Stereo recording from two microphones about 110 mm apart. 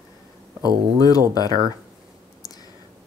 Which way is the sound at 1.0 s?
35° left (ahead or behind).